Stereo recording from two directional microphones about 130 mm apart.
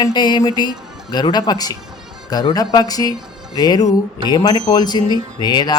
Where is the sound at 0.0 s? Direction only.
35° left (ahead or behind).